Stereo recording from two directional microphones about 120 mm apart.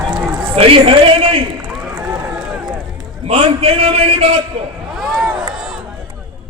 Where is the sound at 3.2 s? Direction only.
55° right (ahead or behind).